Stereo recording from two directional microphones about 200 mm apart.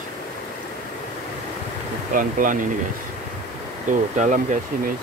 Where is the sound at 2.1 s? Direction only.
40° right (ahead or behind).